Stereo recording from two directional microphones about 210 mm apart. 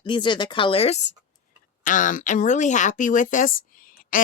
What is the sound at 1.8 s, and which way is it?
Speech, 40° left (ahead or behind).